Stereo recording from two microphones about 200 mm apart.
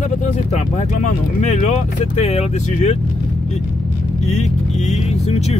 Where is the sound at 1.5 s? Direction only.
35° left (ahead or behind).